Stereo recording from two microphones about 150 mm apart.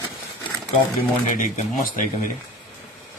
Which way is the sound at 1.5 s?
55° left (ahead or behind).